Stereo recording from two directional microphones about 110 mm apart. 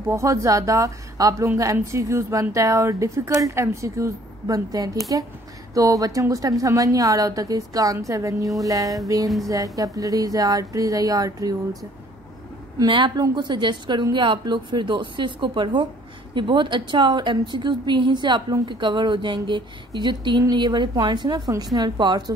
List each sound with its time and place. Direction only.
0.1 s a woman's voice: 25° right (ahead or behind)
12.7 s a woman's voice: 45° right (ahead or behind)